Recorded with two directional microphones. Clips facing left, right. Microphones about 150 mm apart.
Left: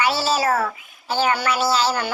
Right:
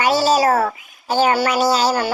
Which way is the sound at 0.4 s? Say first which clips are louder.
Right 4 dB; 40° right (ahead or behind).